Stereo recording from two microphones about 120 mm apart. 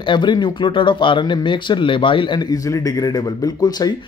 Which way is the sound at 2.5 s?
30° left (ahead or behind).